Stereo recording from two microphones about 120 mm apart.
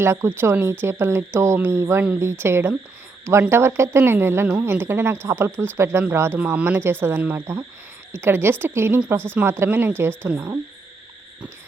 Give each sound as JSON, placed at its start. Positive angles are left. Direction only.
{"t": 0.0, "sound": "speech", "side_deg": -20}